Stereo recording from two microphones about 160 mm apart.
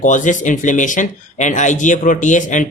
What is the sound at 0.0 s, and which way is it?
Speech, 50° left (ahead or behind).